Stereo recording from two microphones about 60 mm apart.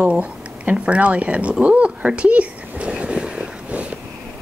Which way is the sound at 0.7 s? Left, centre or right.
Right.